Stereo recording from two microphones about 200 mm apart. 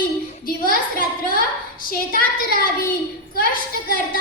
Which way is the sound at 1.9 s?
50° left (ahead or behind).